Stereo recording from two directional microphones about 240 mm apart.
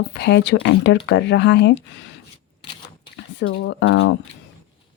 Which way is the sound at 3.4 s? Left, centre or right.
Left.